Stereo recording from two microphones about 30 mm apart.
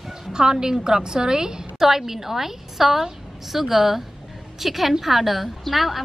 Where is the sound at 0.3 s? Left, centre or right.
Right.